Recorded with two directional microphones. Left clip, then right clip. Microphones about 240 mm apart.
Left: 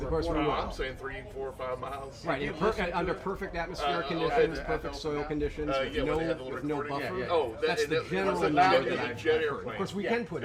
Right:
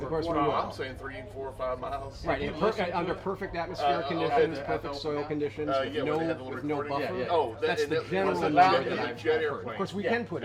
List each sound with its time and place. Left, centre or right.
0.1 s speech: right
2.2 s speech: right